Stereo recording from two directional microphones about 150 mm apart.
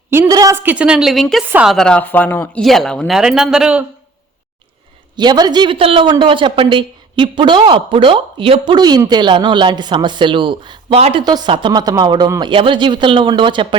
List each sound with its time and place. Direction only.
0.1 s a woman's voice: 20° right (ahead or behind)
0.5 s a man's voice: 10° right (ahead or behind)
1.5 s speech: 10° right (ahead or behind)
1.7 s a man's voice: 5° left (ahead or behind)
5.1 s a man's voice: 30° right (ahead or behind)